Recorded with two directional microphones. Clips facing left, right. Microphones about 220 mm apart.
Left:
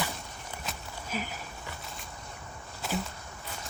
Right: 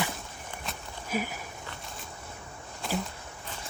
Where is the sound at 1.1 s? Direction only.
10° right (ahead or behind).